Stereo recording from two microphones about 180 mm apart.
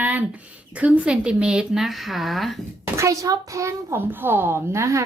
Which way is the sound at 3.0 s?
20° right (ahead or behind).